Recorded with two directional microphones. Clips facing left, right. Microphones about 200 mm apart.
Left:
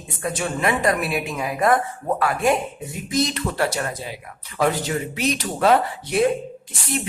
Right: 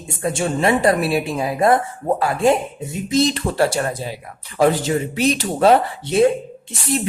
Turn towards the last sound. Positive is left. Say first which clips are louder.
# right 5 dB
turn(degrees=-25)  # may be behind; listen again after turning